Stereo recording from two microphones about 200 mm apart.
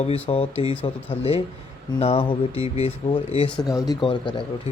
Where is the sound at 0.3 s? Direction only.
30° left (ahead or behind).